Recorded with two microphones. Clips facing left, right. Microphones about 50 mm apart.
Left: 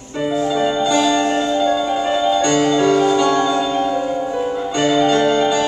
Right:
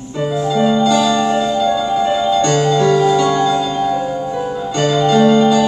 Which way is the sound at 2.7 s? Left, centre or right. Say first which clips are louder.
Right 2 dB; left.